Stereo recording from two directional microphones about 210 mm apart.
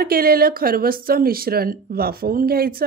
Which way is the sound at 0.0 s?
45° right (ahead or behind).